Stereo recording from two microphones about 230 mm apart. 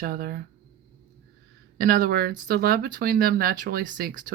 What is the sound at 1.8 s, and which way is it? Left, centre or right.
Speech, right.